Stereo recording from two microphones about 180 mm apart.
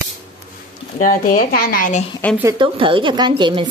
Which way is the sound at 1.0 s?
50° left (ahead or behind).